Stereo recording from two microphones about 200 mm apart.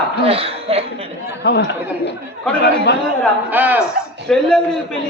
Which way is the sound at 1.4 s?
55° left (ahead or behind).